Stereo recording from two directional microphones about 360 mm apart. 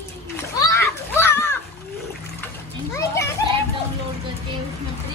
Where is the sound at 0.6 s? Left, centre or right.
Centre.